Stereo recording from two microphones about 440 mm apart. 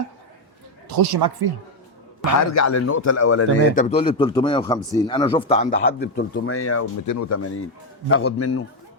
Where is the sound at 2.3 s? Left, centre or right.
Left.